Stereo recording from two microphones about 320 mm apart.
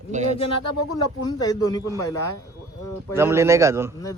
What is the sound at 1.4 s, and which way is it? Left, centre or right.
Speech, centre.